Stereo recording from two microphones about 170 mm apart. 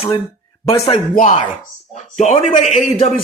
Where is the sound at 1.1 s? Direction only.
50° left (ahead or behind).